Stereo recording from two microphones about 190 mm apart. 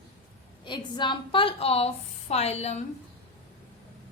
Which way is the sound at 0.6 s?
25° left (ahead or behind).